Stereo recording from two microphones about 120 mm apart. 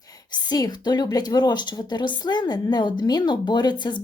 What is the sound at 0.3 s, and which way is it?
A woman's voice, 35° left (ahead or behind).